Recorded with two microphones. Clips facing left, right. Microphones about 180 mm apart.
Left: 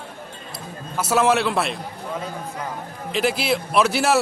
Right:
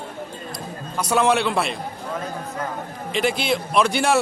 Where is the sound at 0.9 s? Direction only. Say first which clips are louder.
Even; 5° left (ahead or behind).